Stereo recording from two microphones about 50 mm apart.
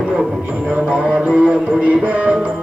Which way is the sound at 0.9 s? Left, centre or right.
Centre.